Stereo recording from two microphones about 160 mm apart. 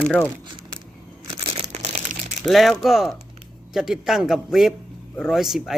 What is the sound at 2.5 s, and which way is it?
A man's voice, centre (ahead or behind).